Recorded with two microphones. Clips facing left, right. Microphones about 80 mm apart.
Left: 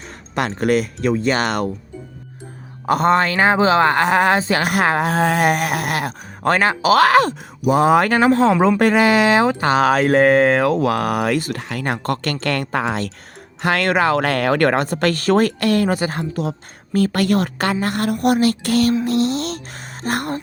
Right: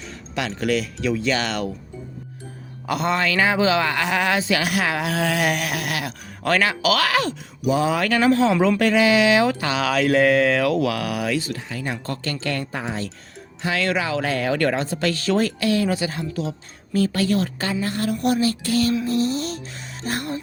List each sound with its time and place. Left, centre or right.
0.0 s speech: left
2.8 s a man's voice: left
13.6 s speech: left
19.0 s music: left
20.0 s speech: left